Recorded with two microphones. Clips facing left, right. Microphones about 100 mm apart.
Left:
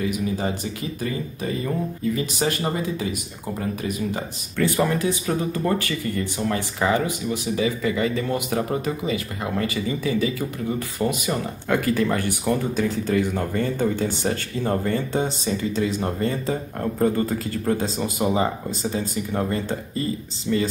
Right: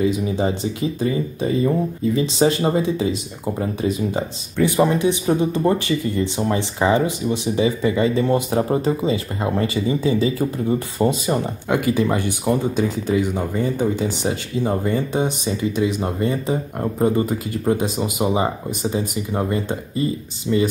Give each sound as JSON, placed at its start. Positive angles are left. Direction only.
{"t": 0.0, "sound": "speech", "side_deg": -25}